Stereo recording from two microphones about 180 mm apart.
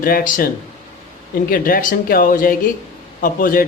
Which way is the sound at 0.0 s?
50° left (ahead or behind).